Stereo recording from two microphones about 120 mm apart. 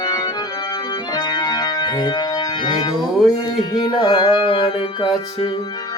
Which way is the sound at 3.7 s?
40° left (ahead or behind).